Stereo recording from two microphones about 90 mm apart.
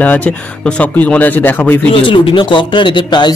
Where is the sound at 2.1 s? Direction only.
65° left (ahead or behind).